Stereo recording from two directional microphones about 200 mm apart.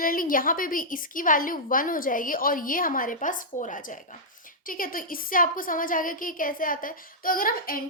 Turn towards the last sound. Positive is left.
turn(degrees=45)  # may be behind; listen again after turning